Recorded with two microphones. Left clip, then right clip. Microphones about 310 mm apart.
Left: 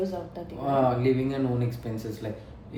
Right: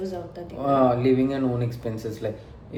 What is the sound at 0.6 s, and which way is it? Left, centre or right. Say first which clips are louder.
A man's voice: right 4 dB; centre.